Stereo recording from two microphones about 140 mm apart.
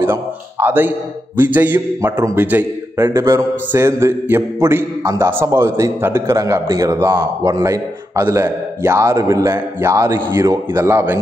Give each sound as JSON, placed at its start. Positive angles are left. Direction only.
{"t": 0.0, "sound": "a man's voice", "side_deg": -15}